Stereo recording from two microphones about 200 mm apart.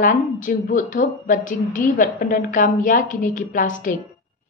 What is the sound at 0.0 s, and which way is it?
A woman's voice, 40° left (ahead or behind).